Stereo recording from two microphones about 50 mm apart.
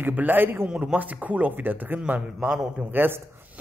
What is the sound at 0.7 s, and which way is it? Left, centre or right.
Speech, right.